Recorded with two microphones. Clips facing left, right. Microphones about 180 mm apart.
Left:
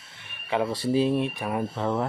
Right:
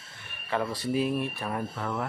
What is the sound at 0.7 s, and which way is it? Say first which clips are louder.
Speech: left 6 dB; 30° left (ahead or behind).